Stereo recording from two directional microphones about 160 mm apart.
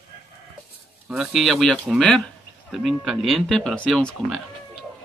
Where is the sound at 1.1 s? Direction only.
Centre (ahead or behind).